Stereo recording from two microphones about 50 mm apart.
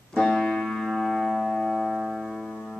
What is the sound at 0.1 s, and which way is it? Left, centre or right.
Music, centre.